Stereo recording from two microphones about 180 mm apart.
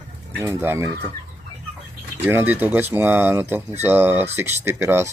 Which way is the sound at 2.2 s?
10° right (ahead or behind).